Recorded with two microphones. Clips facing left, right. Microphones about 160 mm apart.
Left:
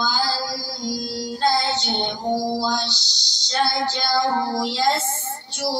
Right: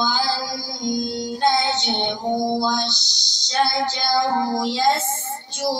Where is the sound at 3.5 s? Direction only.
15° right (ahead or behind).